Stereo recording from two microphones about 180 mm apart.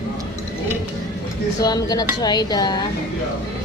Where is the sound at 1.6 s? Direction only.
20° left (ahead or behind).